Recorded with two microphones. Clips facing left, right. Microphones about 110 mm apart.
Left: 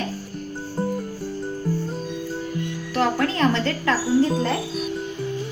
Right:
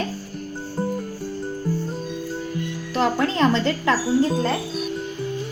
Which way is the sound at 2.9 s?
20° right (ahead or behind).